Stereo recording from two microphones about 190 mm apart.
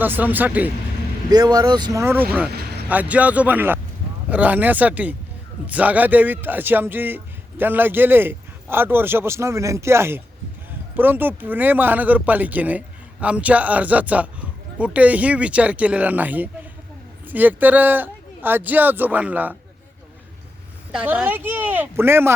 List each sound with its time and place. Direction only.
0.0 s speech: 10° right (ahead or behind)
1.3 s speech: 20° right (ahead or behind)
20.9 s speech: 5° right (ahead or behind)